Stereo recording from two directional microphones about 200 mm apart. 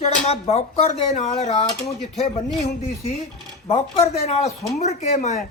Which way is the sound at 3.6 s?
30° left (ahead or behind).